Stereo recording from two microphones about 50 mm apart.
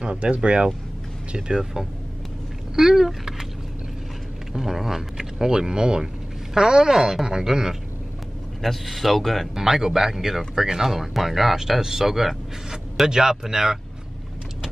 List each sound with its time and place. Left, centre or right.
0.0 s speech: right; by 3.4 s centre
4.6 s speech: centre
8.6 s speech: centre
9.7 s speech: centre